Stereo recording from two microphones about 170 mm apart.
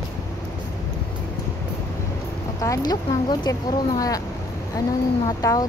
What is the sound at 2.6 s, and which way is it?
Speech, 20° left (ahead or behind).